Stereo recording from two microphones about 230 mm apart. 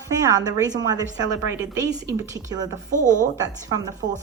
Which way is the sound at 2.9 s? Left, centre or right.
Right.